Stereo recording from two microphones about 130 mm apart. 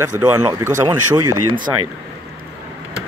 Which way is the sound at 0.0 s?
30° right (ahead or behind).